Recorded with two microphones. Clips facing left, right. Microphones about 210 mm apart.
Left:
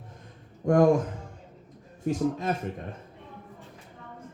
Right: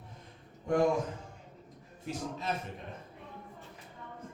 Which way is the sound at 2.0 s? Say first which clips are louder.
Left 10 dB; 45° left (ahead or behind).